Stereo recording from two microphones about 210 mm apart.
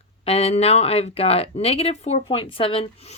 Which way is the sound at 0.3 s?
30° left (ahead or behind).